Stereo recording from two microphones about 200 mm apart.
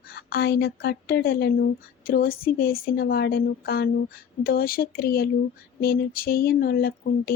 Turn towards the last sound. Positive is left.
turn(degrees=50)  # may be behind; listen again after turning